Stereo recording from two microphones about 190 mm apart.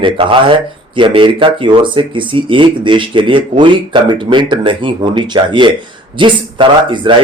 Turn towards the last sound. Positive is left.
turn(degrees=-25)  # may be behind; listen again after turning